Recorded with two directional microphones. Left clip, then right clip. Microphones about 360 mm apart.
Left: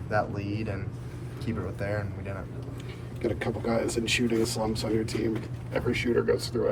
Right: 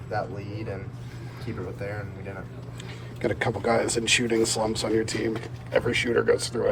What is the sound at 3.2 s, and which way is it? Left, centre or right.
Speech, centre.